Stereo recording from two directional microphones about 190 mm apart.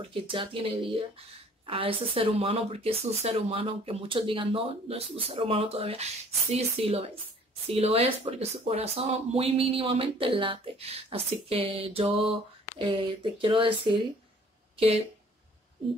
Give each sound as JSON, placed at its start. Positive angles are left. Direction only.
{"t": 0.0, "sound": "speech", "side_deg": -25}